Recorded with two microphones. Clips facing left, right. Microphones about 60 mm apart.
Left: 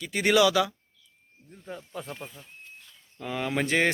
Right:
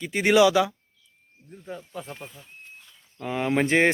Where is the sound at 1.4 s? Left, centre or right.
Centre.